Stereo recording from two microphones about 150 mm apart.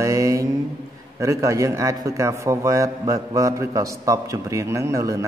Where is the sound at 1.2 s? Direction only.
20° right (ahead or behind).